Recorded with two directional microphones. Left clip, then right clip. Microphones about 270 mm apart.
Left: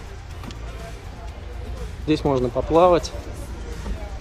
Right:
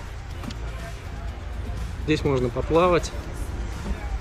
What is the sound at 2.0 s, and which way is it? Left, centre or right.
Speech, centre.